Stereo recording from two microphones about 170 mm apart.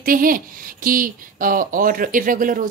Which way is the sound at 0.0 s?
55° right (ahead or behind).